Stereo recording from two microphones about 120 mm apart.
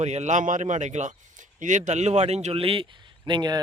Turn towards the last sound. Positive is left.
turn(degrees=-40)  # may be behind; listen again after turning